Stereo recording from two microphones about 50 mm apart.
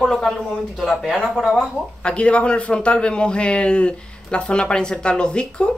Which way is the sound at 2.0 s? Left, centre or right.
Left.